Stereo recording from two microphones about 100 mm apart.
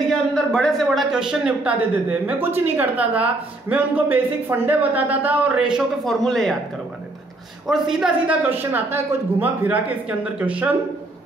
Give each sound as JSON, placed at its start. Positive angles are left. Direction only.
{"t": 0.1, "sound": "a sound", "side_deg": 5}
{"t": 0.8, "sound": "speech", "side_deg": -5}
{"t": 6.0, "sound": "a woman's voice", "side_deg": 5}
{"t": 7.6, "sound": "a woman's voice", "side_deg": -5}
{"t": 8.4, "sound": "speech", "side_deg": -20}